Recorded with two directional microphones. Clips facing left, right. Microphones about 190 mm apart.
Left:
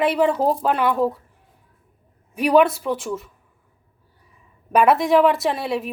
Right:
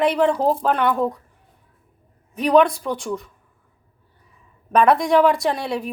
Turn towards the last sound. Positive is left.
turn(degrees=5)  # may be behind; listen again after turning